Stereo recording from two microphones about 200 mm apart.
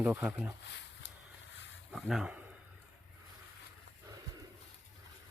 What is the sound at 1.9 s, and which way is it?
Speech, centre (ahead or behind).